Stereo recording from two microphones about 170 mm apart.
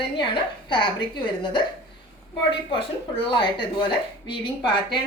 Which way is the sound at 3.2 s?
30° left (ahead or behind).